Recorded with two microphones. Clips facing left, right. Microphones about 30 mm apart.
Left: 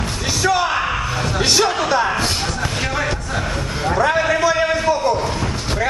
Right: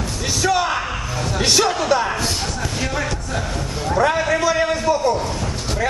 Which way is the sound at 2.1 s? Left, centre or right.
Left.